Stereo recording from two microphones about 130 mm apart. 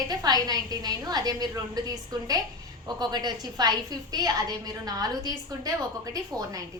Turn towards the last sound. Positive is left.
turn(degrees=-30)  # may be behind; listen again after turning